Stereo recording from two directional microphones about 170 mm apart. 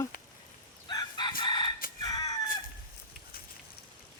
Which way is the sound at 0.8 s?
25° left (ahead or behind).